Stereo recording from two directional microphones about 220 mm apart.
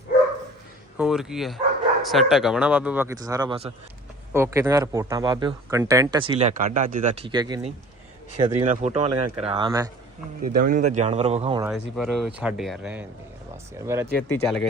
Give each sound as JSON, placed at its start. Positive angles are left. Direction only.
{"t": 0.9, "sound": "speech", "side_deg": 0}
{"t": 4.3, "sound": "speech", "side_deg": -10}
{"t": 6.6, "sound": "speech", "side_deg": -35}
{"t": 7.3, "sound": "speech", "side_deg": -20}
{"t": 8.6, "sound": "speech", "side_deg": -30}
{"t": 10.4, "sound": "speech", "side_deg": -35}
{"t": 11.7, "sound": "speech", "side_deg": 0}
{"t": 14.2, "sound": "speech", "side_deg": 5}